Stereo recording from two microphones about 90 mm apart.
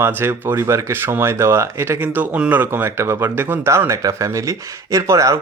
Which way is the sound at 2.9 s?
30° right (ahead or behind).